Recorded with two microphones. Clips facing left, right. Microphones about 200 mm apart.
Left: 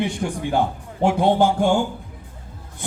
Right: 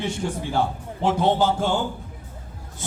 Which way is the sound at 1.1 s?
10° left (ahead or behind).